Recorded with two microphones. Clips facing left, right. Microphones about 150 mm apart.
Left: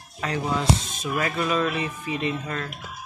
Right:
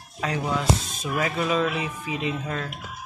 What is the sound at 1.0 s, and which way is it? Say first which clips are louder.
Speech: even; 15° right (ahead or behind).